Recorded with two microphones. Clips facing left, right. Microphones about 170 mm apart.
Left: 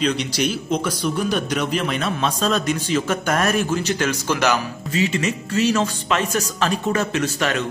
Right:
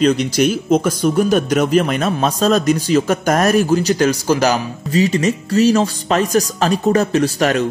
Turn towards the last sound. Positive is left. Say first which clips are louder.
# right 7 dB
turn(degrees=-35)  # may be behind; listen again after turning